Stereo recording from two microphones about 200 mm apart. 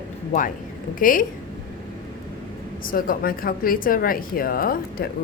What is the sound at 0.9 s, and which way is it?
Speech, 45° left (ahead or behind).